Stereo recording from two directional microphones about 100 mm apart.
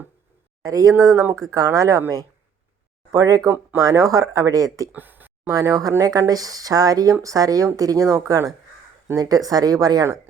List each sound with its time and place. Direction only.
0.6 s speech: 35° right (ahead or behind)
4.9 s speech: 20° right (ahead or behind)
5.5 s speech: 35° right (ahead or behind)